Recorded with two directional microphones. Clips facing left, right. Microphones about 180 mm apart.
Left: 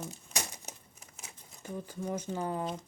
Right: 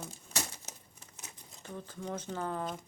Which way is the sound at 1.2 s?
15° left (ahead or behind).